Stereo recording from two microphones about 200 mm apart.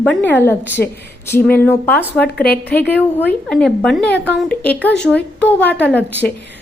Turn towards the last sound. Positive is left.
turn(degrees=5)  # may be behind; listen again after turning